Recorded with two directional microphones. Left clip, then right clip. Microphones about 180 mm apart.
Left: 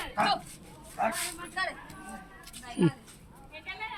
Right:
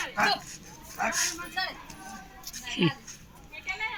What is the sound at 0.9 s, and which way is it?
Speech, 55° left (ahead or behind).